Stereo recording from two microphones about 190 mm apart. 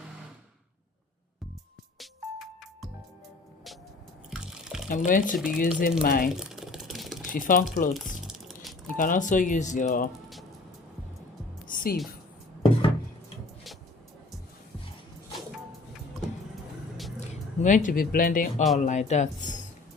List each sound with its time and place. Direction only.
2.0 s music: centre (ahead or behind)
4.3 s drip: centre (ahead or behind)
4.9 s speech: 45° left (ahead or behind)
6.4 s a sound: centre (ahead or behind)
7.3 s speech: 45° left (ahead or behind)
9.0 s speech: 45° left (ahead or behind)
11.7 s music: 50° left (ahead or behind)
17.2 s speech: 40° left (ahead or behind)